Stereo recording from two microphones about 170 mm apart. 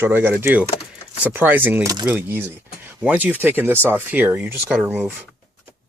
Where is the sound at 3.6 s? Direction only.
10° right (ahead or behind).